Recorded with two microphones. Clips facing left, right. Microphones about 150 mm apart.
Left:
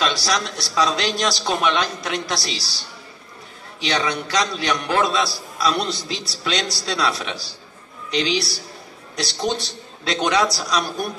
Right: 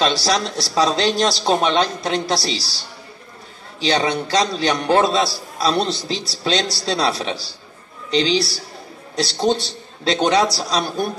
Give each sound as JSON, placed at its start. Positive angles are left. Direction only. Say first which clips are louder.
{"t": 0.0, "sound": "a man's voice", "louder": "right 4 dB", "side_deg": -30}
{"t": 3.8, "sound": "a man's voice", "louder": "right 4 dB", "side_deg": -30}